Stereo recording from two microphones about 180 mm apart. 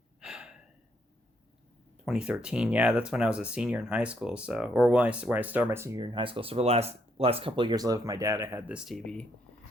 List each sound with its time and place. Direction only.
0.2 s gasp: 5° right (ahead or behind)
2.0 s speech: 5° right (ahead or behind)